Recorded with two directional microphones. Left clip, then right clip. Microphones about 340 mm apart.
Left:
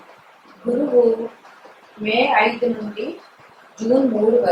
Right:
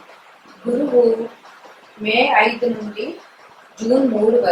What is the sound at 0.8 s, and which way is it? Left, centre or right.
Speech, centre.